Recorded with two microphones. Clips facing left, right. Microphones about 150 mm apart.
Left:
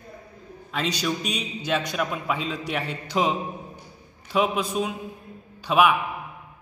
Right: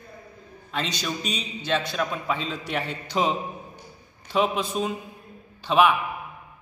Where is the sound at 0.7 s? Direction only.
5° left (ahead or behind).